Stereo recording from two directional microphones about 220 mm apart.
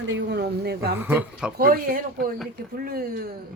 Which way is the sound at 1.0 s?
10° right (ahead or behind).